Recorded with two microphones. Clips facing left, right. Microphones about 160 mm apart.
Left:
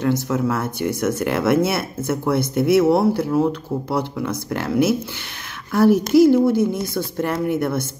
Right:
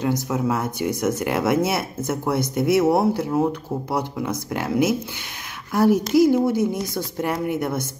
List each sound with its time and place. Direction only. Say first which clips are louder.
0.0 s speech: left 3 dB; 15° right (ahead or behind)